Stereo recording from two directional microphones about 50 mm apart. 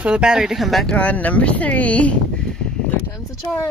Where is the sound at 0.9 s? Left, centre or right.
Left.